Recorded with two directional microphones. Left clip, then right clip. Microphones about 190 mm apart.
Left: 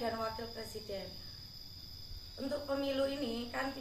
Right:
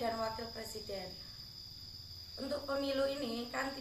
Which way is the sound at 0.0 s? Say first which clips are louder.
Right 1 dB; 15° right (ahead or behind).